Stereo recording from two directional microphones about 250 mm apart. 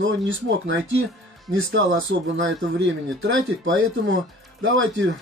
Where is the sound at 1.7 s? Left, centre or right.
Right.